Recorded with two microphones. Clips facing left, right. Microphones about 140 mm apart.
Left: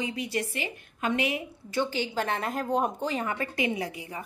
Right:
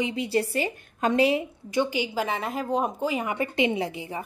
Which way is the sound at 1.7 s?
15° right (ahead or behind).